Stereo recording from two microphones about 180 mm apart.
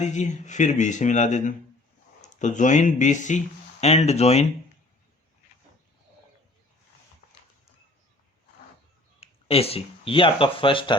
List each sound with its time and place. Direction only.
0.0 s speech: 40° left (ahead or behind)
9.2 s speech: 35° left (ahead or behind)